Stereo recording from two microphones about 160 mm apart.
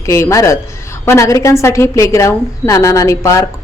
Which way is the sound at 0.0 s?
20° left (ahead or behind).